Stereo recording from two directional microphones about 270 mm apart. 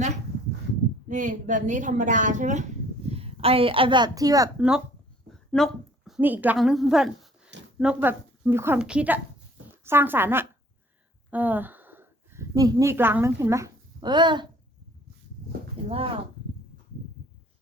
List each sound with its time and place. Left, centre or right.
1.0 s a woman's voice: right
15.9 s speech: right